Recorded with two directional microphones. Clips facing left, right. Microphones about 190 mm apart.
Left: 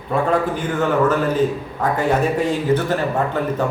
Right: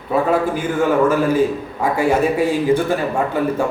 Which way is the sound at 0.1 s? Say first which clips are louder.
Right 2 dB; 10° right (ahead or behind).